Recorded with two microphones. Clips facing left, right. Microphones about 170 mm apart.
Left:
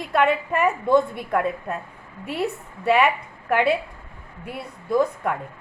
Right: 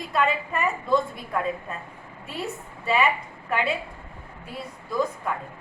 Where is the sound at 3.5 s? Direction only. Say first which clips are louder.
Left 6 dB; 65° left (ahead or behind).